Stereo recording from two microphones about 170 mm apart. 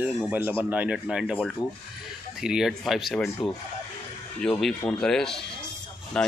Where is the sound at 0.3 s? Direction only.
15° right (ahead or behind).